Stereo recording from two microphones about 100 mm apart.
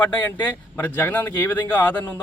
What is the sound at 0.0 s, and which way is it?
Speech, 20° left (ahead or behind).